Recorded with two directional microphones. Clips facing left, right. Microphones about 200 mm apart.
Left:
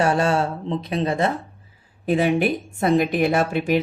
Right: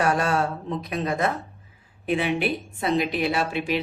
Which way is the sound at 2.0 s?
40° left (ahead or behind).